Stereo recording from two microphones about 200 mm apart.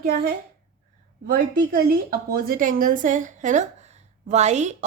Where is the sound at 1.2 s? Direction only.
50° right (ahead or behind).